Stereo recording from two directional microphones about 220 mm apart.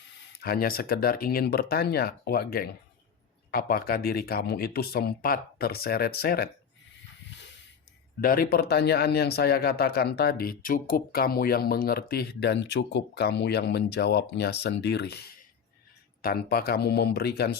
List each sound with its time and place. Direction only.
0.3 s speech: 45° left (ahead or behind)
8.2 s speech: 40° left (ahead or behind)
16.2 s speech: 45° left (ahead or behind)